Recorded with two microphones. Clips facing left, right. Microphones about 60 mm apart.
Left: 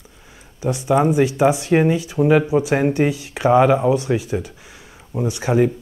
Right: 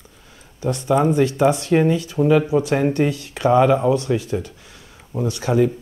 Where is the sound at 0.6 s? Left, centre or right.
Centre.